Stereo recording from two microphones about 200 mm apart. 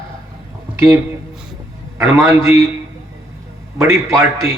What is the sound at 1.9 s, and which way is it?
Speech, 15° right (ahead or behind).